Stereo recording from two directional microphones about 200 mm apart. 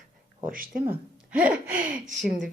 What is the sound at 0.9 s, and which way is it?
Speech, 5° right (ahead or behind).